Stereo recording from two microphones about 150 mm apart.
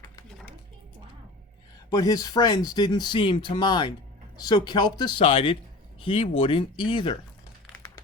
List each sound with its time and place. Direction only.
1.9 s speech: 25° left (ahead or behind)